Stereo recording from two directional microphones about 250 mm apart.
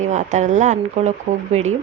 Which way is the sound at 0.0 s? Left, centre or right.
Right.